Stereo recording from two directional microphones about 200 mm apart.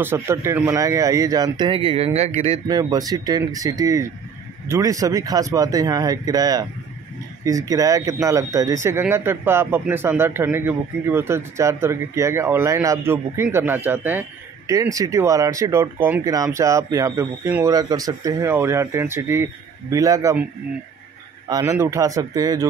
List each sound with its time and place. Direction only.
0.0 s speech: 10° right (ahead or behind); by 2.6 s 30° right (ahead or behind)
2.7 s speech: 20° right (ahead or behind)
21.5 s speech: 15° right (ahead or behind)